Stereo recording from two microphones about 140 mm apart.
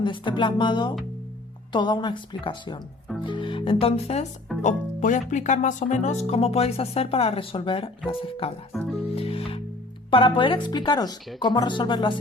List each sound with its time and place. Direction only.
0.0 s speech: 35° left (ahead or behind)
4.6 s speech: 60° left (ahead or behind); by 8.5 s 40° left (ahead or behind)
8.7 s speech: centre (ahead or behind)
9.1 s music: 45° left (ahead or behind)
10.1 s speech: 35° left (ahead or behind)